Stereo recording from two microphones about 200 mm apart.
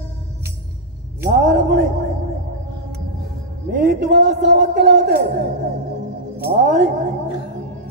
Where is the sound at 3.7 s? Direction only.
45° right (ahead or behind).